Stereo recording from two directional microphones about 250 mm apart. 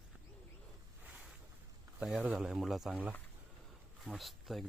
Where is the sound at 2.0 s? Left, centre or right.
Centre.